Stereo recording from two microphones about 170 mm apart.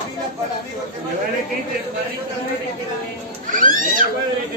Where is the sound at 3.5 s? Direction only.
50° right (ahead or behind).